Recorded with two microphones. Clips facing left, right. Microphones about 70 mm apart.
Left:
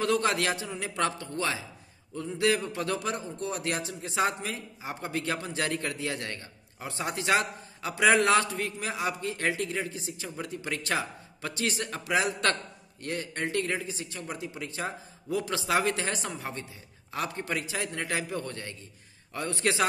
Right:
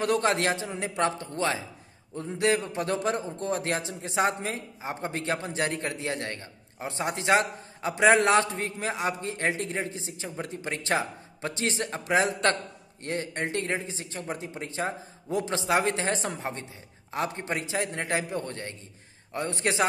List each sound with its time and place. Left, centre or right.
0.0 s a man's voice: right